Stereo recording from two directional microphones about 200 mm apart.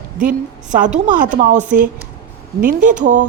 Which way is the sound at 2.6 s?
45° right (ahead or behind).